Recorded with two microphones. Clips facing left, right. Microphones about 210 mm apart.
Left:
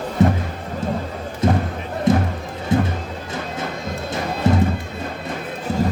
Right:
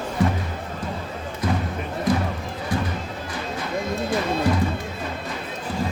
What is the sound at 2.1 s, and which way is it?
Music, 25° left (ahead or behind).